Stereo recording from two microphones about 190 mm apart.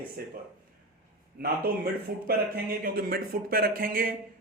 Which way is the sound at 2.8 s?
50° right (ahead or behind).